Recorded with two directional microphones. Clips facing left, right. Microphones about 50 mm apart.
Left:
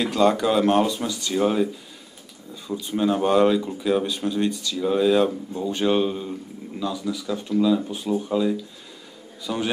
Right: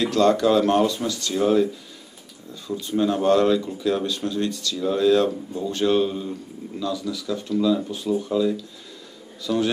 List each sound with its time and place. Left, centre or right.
0.0 s speech: centre